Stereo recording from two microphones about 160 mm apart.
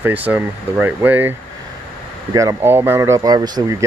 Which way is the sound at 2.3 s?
15° right (ahead or behind).